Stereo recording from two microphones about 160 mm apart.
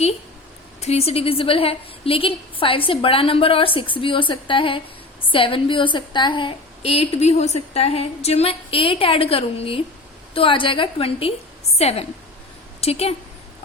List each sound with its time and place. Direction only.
0.8 s a woman's voice: 40° left (ahead or behind)